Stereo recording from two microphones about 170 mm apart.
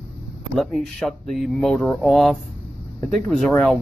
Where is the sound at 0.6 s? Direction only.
Centre (ahead or behind).